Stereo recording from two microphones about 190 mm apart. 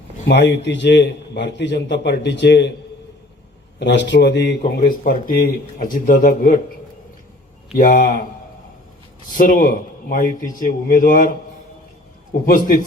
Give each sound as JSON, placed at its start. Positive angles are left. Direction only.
{"t": 0.3, "sound": "a man's voice", "side_deg": 65}
{"t": 3.8, "sound": "a man's voice", "side_deg": 65}
{"t": 4.6, "sound": "speech", "side_deg": 45}
{"t": 7.8, "sound": "speech", "side_deg": 45}
{"t": 9.3, "sound": "speech", "side_deg": 45}
{"t": 12.5, "sound": "speech", "side_deg": 45}